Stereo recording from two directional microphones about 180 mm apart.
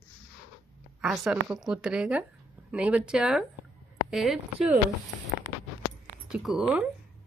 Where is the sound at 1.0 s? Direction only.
5° right (ahead or behind).